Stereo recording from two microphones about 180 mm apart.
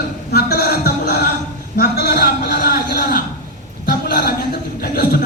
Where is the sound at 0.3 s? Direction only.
60° left (ahead or behind).